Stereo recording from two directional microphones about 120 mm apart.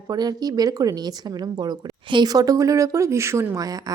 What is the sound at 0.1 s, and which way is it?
A woman's voice, 35° right (ahead or behind).